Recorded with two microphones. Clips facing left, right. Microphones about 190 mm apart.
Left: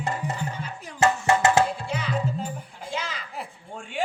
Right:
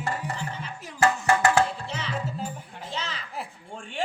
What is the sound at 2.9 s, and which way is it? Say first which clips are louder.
Music: left 3 dB; 10° left (ahead or behind).